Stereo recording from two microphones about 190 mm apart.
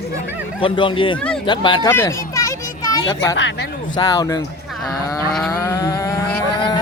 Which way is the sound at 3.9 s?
20° left (ahead or behind).